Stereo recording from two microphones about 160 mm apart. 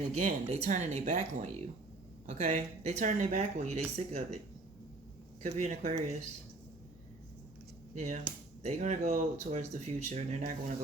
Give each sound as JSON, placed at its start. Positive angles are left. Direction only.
{"t": 0.2, "sound": "speech", "side_deg": -50}
{"t": 5.4, "sound": "speech", "side_deg": -45}
{"t": 7.9, "sound": "speech", "side_deg": -50}